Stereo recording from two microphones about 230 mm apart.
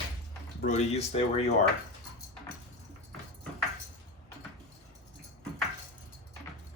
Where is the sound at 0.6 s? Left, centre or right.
Left.